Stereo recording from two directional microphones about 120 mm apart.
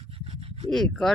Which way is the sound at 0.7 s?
5° left (ahead or behind).